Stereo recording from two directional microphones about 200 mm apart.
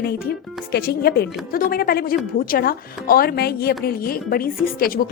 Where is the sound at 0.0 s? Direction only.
50° left (ahead or behind).